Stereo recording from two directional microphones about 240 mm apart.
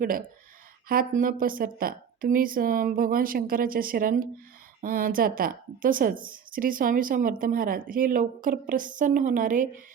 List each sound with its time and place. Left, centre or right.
0.0 s speech: right